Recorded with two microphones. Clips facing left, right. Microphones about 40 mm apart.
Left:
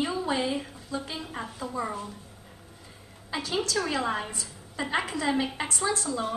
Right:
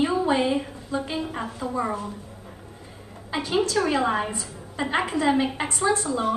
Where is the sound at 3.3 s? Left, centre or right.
Right.